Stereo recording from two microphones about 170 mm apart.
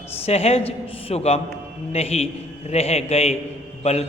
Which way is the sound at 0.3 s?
35° left (ahead or behind).